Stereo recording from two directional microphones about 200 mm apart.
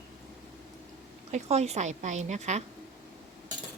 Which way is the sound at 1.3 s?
35° right (ahead or behind).